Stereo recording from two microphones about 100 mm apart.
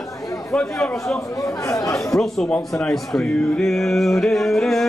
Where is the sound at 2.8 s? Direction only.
5° left (ahead or behind).